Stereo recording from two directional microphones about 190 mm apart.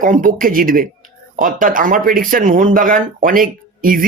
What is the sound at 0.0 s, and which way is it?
Speech, 45° right (ahead or behind).